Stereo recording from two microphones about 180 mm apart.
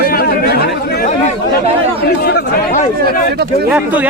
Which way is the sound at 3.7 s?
10° right (ahead or behind).